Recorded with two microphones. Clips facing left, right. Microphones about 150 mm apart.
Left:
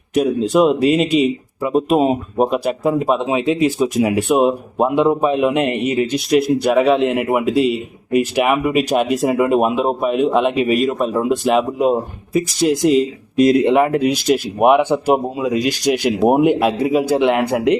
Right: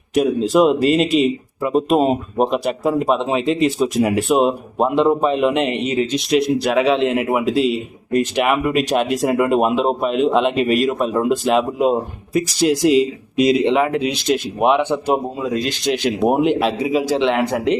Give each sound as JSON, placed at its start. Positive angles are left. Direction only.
{"t": 0.1, "sound": "a man's voice", "side_deg": 0}
{"t": 5.7, "sound": "speech", "side_deg": 60}
{"t": 6.1, "sound": "a man's voice", "side_deg": 0}